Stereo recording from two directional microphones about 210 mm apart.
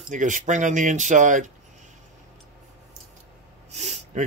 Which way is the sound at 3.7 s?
30° right (ahead or behind).